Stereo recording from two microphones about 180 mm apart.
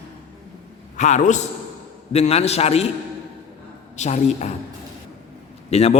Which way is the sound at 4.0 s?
40° left (ahead or behind).